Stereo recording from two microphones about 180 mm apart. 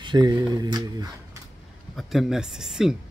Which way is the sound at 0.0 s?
25° right (ahead or behind).